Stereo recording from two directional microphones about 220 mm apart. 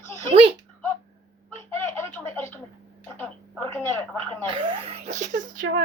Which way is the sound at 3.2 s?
10° left (ahead or behind).